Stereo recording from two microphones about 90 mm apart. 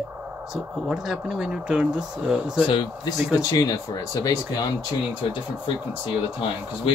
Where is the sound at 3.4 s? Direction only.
40° left (ahead or behind).